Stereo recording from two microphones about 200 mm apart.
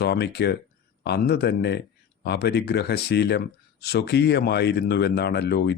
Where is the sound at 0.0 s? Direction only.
55° left (ahead or behind).